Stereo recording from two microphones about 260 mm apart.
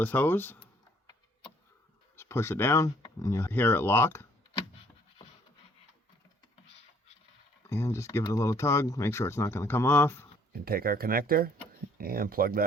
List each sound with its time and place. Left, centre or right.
0.0 s speech: centre
2.1 s speech: centre
7.7 s speech: centre
10.5 s speech: right